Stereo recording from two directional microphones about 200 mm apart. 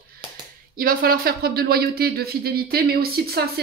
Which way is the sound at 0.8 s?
45° right (ahead or behind).